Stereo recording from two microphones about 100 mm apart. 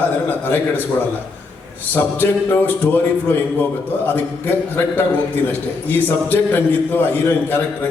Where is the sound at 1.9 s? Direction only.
20° left (ahead or behind).